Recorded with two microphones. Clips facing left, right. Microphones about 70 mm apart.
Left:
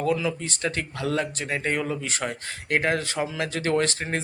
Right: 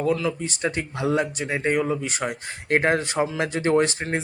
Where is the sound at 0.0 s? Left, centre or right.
Centre.